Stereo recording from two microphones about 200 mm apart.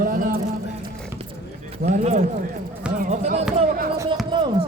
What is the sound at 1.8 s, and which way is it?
Speech, 40° right (ahead or behind).